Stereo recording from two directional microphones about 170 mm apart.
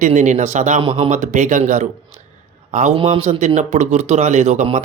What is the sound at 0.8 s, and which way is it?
Speech, 35° right (ahead or behind).